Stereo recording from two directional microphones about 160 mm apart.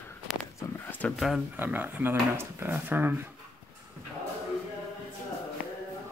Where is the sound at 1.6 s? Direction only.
10° right (ahead or behind).